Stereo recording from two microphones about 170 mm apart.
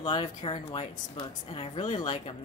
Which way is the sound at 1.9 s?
25° left (ahead or behind).